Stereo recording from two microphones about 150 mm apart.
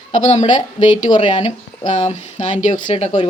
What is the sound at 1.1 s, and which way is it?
Speech, 30° left (ahead or behind).